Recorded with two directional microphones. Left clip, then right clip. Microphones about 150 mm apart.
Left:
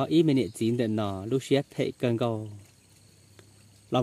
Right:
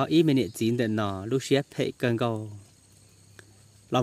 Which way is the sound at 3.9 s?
5° left (ahead or behind).